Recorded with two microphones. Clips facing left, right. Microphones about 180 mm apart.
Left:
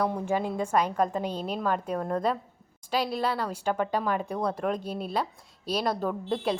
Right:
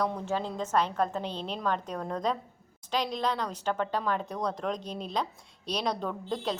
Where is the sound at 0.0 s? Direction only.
10° left (ahead or behind).